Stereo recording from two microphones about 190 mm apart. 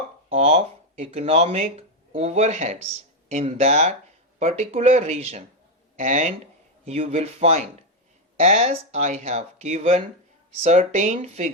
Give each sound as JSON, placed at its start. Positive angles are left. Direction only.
{"t": 0.3, "sound": "speech", "side_deg": -35}